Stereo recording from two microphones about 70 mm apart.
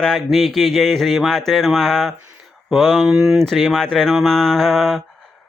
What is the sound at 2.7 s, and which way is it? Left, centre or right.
Speech, centre.